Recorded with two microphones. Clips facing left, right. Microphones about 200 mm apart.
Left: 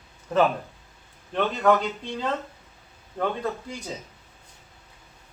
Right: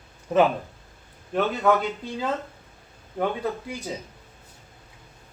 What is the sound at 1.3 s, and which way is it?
Speech, 5° right (ahead or behind).